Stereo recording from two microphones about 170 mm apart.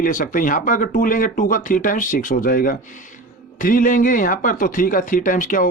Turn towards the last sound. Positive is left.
turn(degrees=50)  # may be behind; listen again after turning